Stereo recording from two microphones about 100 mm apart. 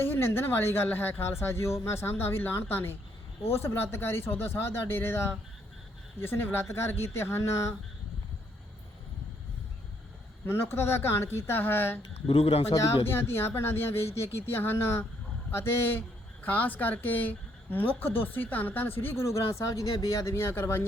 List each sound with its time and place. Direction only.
0.0 s speech: 20° left (ahead or behind)
10.4 s speech: 25° left (ahead or behind)
12.3 s speech: 80° left
13.1 s speech: 25° left (ahead or behind)